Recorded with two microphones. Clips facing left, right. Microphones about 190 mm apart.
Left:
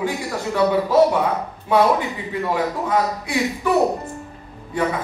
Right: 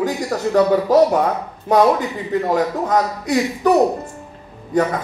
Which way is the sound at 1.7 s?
45° right (ahead or behind).